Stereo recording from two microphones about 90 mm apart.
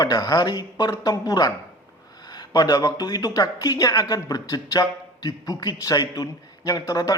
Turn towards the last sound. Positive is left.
turn(degrees=40)  # may be behind; listen again after turning